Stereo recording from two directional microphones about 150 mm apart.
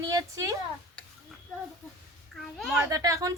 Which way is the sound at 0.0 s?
20° right (ahead or behind).